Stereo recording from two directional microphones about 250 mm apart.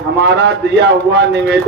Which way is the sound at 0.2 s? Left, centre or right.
Right.